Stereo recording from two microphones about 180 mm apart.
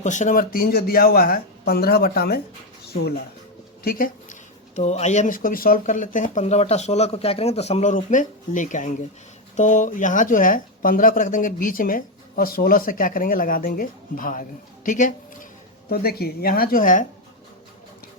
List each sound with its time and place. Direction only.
0.0 s speech: 40° left (ahead or behind); by 3.2 s 60° left (ahead or behind)
3.8 s speech: 50° left (ahead or behind)
14.8 s a sound: 45° left (ahead or behind)
15.9 s speech: 60° left (ahead or behind)